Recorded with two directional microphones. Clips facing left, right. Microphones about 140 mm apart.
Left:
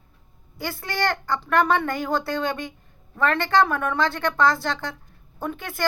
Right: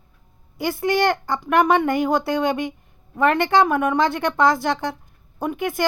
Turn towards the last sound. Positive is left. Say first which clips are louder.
# right 5 dB
turn(degrees=-20)  # may be behind; listen again after turning